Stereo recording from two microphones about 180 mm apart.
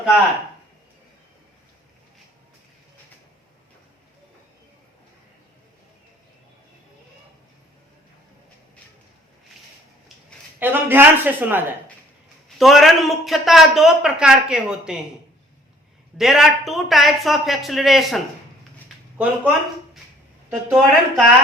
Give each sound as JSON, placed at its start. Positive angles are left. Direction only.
{"t": 10.6, "sound": "a man's voice", "side_deg": -10}
{"t": 12.5, "sound": "a man's voice", "side_deg": 0}
{"t": 16.1, "sound": "a man's voice", "side_deg": 0}